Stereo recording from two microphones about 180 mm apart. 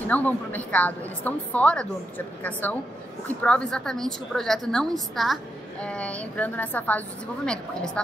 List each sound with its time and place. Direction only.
0.0 s a woman's voice: 10° left (ahead or behind)